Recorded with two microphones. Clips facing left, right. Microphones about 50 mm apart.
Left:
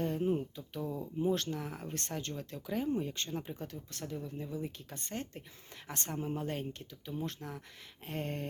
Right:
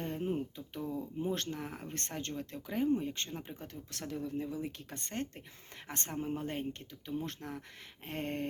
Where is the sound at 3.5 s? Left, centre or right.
Right.